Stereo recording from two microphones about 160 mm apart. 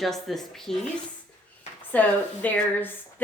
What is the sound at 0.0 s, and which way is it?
Speech, centre (ahead or behind).